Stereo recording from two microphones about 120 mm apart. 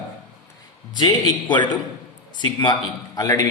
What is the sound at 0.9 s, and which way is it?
A man's voice, 40° left (ahead or behind).